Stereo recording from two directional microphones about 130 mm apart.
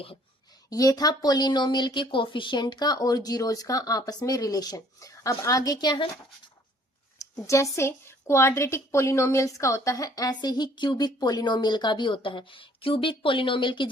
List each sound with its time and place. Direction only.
0.7 s a woman's voice: 30° left (ahead or behind)
7.2 s a woman's voice: 25° left (ahead or behind)